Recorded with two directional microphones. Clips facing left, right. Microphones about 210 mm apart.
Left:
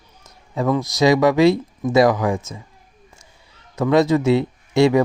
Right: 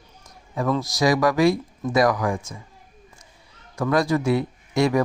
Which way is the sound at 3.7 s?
20° left (ahead or behind).